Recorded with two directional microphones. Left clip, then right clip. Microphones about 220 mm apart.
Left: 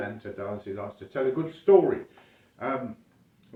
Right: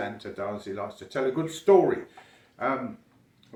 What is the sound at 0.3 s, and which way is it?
Speech, 20° right (ahead or behind).